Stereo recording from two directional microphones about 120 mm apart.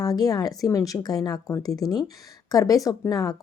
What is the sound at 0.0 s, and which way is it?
Speech, 30° left (ahead or behind).